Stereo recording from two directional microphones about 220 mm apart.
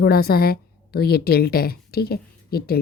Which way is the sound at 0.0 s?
45° left (ahead or behind).